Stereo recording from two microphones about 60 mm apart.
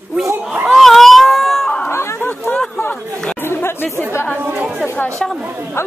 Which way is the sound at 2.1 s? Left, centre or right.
Left.